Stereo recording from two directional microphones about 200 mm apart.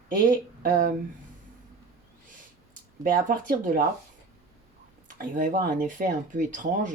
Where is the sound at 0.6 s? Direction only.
40° right (ahead or behind).